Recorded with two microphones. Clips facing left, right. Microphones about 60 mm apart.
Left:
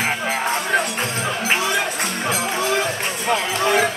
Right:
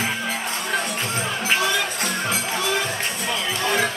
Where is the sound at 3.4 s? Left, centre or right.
Left.